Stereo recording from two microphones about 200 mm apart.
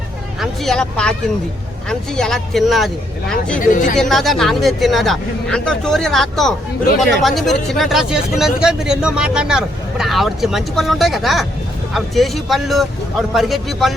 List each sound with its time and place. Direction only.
0.3 s speech: centre (ahead or behind)
3.6 s speech: 40° left (ahead or behind)
4.1 s speech: centre (ahead or behind)